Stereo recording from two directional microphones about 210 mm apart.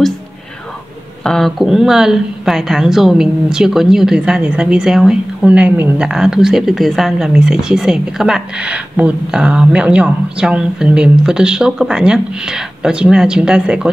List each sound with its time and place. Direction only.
1.2 s speech: centre (ahead or behind)